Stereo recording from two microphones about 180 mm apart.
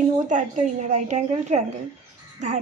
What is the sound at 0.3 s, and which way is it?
A woman's voice, 45° right (ahead or behind).